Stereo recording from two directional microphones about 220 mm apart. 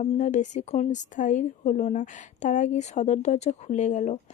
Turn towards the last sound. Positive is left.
turn(degrees=30)  # may be behind; listen again after turning